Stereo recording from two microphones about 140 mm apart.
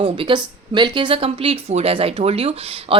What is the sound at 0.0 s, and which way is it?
Speech, 40° right (ahead or behind).